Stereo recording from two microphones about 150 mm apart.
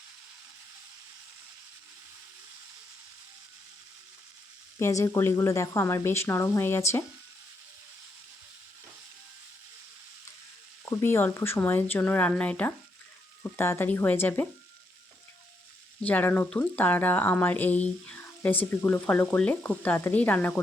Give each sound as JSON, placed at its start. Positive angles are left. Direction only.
{"t": 4.8, "sound": "speech", "side_deg": 20}
{"t": 10.8, "sound": "speech", "side_deg": 15}
{"t": 16.0, "sound": "speech", "side_deg": 10}